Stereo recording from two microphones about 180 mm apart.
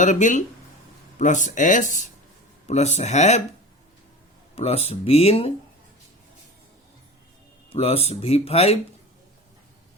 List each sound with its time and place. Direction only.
0.0 s speech: 40° left (ahead or behind)
4.5 s speech: 35° left (ahead or behind)
7.7 s speech: 35° left (ahead or behind)